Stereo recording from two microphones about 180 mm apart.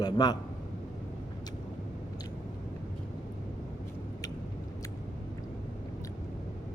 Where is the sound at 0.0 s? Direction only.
25° left (ahead or behind).